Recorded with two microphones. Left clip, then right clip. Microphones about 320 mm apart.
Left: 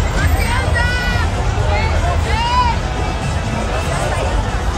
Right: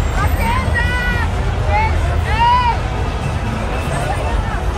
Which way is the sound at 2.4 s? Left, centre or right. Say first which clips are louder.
Right 4 dB; right.